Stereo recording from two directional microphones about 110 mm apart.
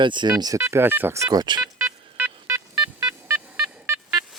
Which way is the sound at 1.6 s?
20° right (ahead or behind).